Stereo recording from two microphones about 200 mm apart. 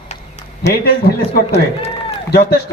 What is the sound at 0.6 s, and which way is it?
Speech, 55° left (ahead or behind).